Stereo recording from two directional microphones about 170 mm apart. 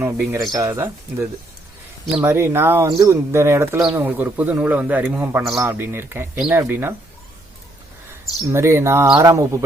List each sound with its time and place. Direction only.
0.0 s speech: 15° right (ahead or behind)
8.5 s speech: 15° right (ahead or behind)